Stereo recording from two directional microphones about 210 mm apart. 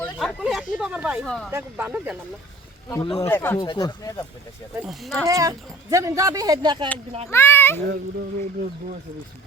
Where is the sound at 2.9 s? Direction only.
25° left (ahead or behind).